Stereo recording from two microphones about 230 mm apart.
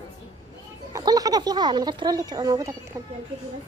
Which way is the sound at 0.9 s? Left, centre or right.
Centre.